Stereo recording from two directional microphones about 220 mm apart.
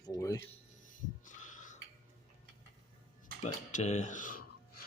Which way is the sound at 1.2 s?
35° left (ahead or behind).